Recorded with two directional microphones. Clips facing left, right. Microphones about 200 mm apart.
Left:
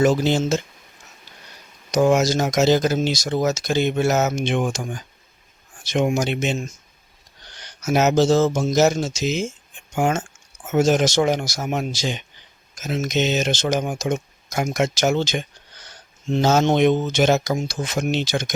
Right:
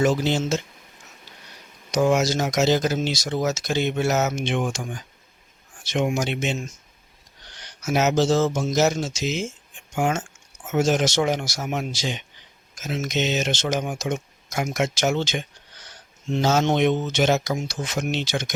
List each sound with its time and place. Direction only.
0.0 s speech: 45° left (ahead or behind)
1.9 s speech: 45° left (ahead or behind)
7.9 s speech: 40° left (ahead or behind)